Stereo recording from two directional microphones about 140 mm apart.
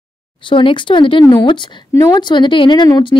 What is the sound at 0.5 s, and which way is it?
Speech, 35° left (ahead or behind).